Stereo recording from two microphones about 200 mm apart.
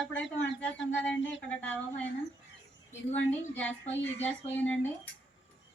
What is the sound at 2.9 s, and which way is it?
A woman's voice, 10° left (ahead or behind).